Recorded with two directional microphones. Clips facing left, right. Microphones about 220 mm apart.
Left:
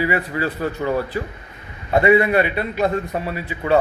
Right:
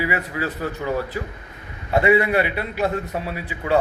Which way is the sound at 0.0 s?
10° right (ahead or behind).